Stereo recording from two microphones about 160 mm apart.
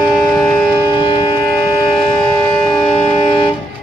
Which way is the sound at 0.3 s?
5° left (ahead or behind).